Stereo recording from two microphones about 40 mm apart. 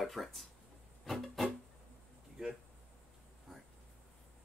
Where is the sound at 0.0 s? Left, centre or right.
Centre.